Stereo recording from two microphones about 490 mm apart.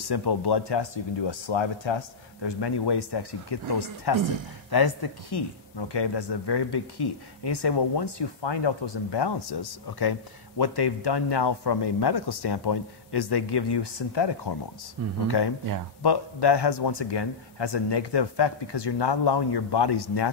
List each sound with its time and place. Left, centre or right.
0.1 s speech: left